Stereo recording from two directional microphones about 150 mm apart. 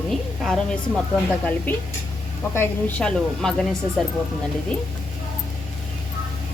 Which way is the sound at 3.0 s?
5° left (ahead or behind).